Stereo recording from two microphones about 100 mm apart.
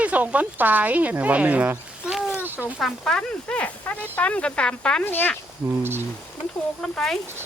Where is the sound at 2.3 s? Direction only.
20° right (ahead or behind).